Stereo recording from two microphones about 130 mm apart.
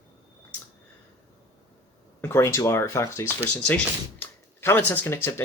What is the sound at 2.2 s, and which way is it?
Speech, 20° left (ahead or behind).